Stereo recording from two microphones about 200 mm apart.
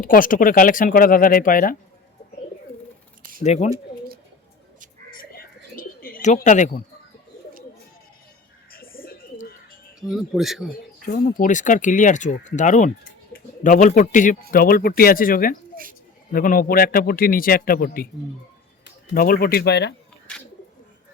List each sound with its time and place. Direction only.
0.0 s a man's voice: 45° left (ahead or behind)
3.4 s speech: 35° left (ahead or behind)
5.1 s bird: 45° left (ahead or behind)
8.7 s bird: 45° left (ahead or behind)
10.0 s speech: centre (ahead or behind)
10.7 s a man's voice: 45° left (ahead or behind)